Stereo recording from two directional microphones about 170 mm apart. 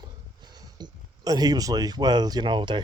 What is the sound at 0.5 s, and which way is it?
Speech, 25° right (ahead or behind).